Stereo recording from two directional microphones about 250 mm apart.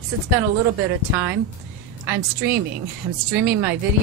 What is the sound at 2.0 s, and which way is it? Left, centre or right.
Speech, right.